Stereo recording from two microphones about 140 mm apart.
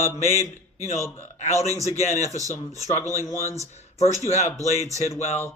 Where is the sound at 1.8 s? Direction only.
55° left (ahead or behind).